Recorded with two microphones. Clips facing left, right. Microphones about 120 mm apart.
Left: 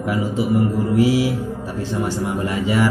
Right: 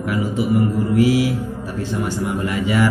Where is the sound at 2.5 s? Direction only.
35° left (ahead or behind).